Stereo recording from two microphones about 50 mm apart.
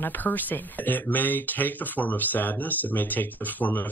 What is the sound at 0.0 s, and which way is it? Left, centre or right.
Speech, left.